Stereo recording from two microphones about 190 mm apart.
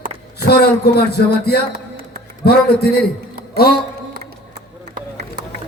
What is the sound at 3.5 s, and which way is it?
Speech, 55° left (ahead or behind).